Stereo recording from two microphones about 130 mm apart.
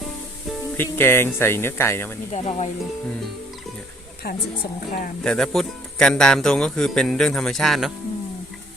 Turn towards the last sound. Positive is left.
turn(degrees=0)  # may be behind; listen again after turning